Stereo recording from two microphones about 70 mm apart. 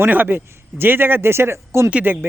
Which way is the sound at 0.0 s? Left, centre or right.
Right.